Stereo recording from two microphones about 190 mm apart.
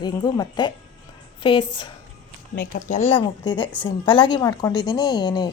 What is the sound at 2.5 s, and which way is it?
Speech, 60° left (ahead or behind).